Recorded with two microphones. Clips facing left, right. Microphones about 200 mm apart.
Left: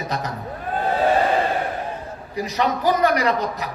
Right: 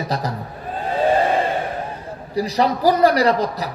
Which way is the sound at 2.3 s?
35° right (ahead or behind).